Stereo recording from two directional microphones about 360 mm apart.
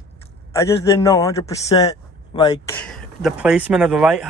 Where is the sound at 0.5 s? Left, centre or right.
Centre.